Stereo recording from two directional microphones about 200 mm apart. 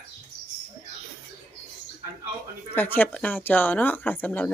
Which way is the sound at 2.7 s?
10° left (ahead or behind).